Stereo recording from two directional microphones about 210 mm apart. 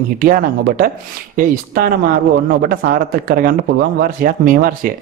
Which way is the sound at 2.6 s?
45° right (ahead or behind).